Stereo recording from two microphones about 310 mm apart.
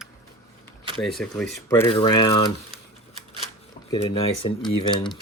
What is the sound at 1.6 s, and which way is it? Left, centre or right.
Speech, centre.